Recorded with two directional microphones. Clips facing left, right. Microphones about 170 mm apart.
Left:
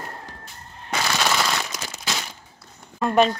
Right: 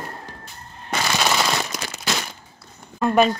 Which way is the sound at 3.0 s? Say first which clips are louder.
Right 1 dB; centre (ahead or behind).